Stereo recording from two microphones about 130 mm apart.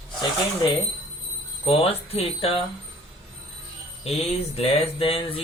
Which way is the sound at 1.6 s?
45° left (ahead or behind).